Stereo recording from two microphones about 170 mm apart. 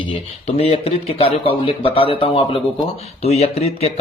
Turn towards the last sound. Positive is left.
turn(degrees=35)  # may be behind; listen again after turning